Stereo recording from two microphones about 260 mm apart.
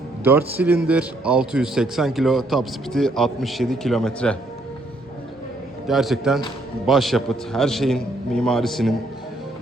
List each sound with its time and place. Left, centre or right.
0.3 s a man's voice: centre
5.9 s a man's voice: centre